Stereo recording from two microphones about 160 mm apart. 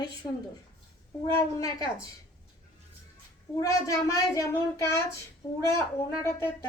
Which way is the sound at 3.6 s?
20° left (ahead or behind).